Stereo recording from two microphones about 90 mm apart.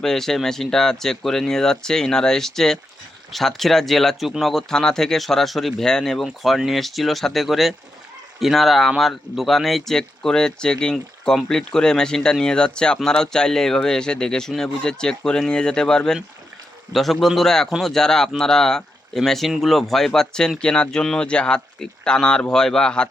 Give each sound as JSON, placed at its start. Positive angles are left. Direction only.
{"t": 0.0, "sound": "speech", "side_deg": 5}